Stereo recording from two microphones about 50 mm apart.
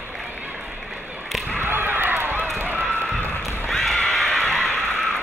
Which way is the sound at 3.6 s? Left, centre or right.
Centre.